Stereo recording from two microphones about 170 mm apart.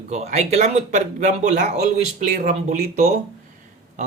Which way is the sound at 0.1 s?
40° right (ahead or behind).